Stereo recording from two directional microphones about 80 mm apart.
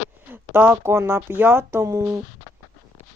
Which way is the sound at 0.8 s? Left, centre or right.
Right.